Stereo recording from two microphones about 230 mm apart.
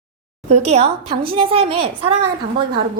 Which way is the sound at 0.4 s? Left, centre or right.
Right.